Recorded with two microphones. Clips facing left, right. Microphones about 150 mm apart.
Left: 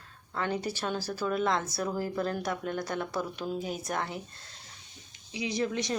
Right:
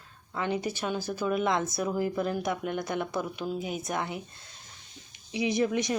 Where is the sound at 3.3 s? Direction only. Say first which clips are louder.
Right 1 dB; 5° right (ahead or behind).